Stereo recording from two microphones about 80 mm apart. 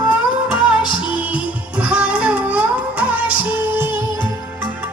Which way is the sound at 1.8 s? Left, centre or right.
Centre.